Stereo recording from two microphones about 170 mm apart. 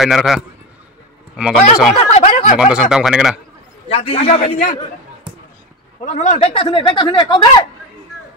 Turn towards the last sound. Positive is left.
turn(degrees=25)  # may be behind; listen again after turning